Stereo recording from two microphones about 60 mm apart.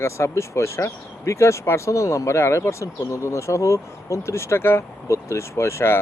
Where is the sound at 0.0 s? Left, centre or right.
Left.